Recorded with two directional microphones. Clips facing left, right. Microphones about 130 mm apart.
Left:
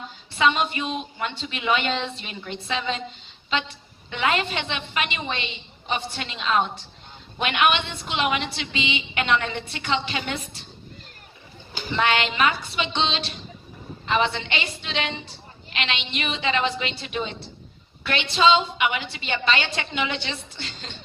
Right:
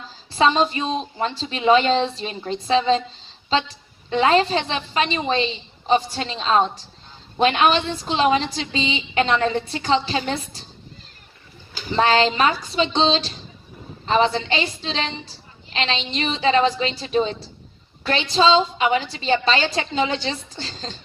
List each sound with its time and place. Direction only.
0.3 s a woman's voice: 35° right (ahead or behind)
11.9 s a woman's voice: 35° right (ahead or behind)